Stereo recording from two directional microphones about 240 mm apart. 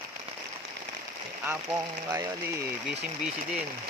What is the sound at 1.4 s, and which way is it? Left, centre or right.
Speech, centre.